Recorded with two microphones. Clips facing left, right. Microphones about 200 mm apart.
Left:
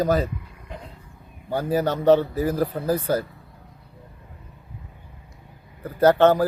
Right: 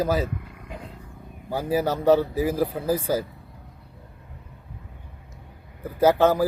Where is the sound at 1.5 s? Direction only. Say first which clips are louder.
Left 1 dB; 10° right (ahead or behind).